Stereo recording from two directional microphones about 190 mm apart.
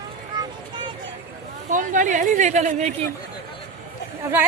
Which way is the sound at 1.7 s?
45° right (ahead or behind).